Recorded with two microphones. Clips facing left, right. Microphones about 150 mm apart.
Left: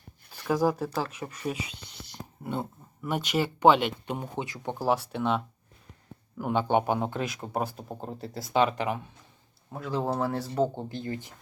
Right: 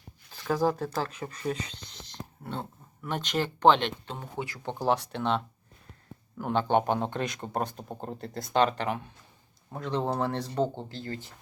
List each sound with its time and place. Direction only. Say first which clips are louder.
0.3 s speech: left 1 dB; 10° left (ahead or behind)
4.7 s speech: even; 5° left (ahead or behind)
6.4 s speech: even; 10° left (ahead or behind)
10.8 s speech: left 3 dB; 20° left (ahead or behind)